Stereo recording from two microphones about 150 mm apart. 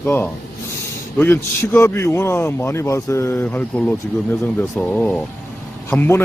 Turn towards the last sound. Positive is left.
turn(degrees=15)  # may be behind; listen again after turning